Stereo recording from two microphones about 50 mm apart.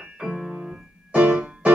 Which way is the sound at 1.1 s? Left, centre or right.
Right.